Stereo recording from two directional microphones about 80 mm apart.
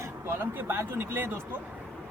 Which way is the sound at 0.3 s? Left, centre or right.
Right.